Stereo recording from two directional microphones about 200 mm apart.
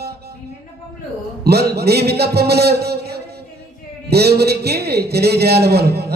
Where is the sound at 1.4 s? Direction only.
55° right (ahead or behind).